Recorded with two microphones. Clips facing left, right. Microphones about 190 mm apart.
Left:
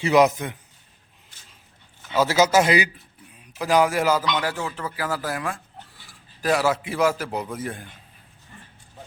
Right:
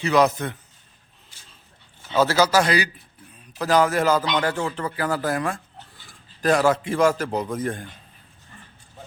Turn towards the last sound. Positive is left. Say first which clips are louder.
# right 4 dB
turn(degrees=5)  # may be behind; listen again after turning